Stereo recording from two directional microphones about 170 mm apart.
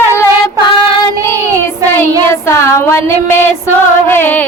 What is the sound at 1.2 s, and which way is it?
Child singing, 20° right (ahead or behind).